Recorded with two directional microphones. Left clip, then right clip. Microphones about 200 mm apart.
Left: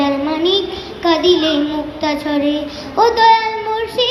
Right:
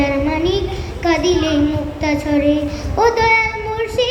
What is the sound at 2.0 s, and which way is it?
Child singing, 15° left (ahead or behind).